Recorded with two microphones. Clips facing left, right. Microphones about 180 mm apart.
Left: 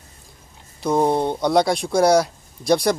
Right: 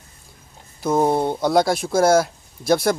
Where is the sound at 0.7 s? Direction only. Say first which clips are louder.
Even; 5° right (ahead or behind).